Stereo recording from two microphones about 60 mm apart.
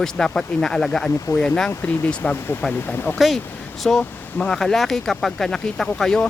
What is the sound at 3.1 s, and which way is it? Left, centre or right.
Speech, centre.